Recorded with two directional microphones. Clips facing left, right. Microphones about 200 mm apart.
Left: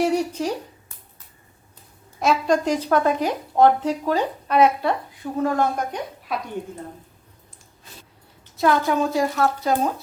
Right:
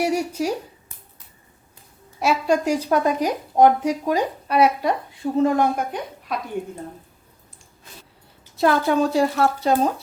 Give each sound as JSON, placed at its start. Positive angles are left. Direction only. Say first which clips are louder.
{"t": 0.0, "sound": "a sound", "louder": "left 1 dB", "side_deg": -10}
{"t": 2.1, "sound": "speech", "louder": "even", "side_deg": -5}
{"t": 5.2, "sound": "speech", "louder": "right 4 dB", "side_deg": -25}
{"t": 5.7, "sound": "a woman's voice", "louder": "right 1 dB", "side_deg": 0}
{"t": 8.5, "sound": "speech", "louder": "right 1 dB", "side_deg": -30}